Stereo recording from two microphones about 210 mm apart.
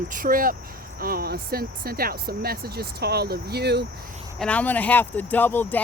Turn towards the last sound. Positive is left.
turn(degrees=10)  # may be behind; listen again after turning